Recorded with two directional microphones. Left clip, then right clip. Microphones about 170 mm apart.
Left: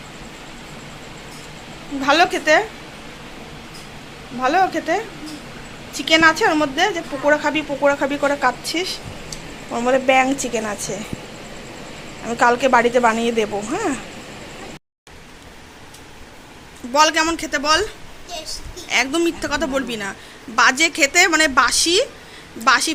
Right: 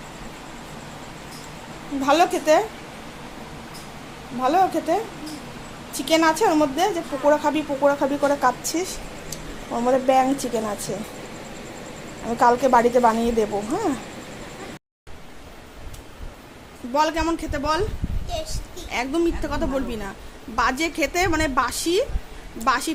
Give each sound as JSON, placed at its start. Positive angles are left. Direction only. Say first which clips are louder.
{"t": 2.0, "sound": "a woman's voice", "louder": "left 3 dB", "side_deg": -5}
{"t": 4.4, "sound": "a woman's voice", "louder": "left 2 dB", "side_deg": -10}
{"t": 12.2, "sound": "a woman's voice", "louder": "left 2 dB", "side_deg": -5}
{"t": 16.9, "sound": "a woman's voice", "louder": "left 6 dB", "side_deg": 0}
{"t": 18.3, "sound": "a sound", "louder": "even", "side_deg": -35}
{"t": 18.9, "sound": "a woman's voice", "louder": "left 5 dB", "side_deg": 0}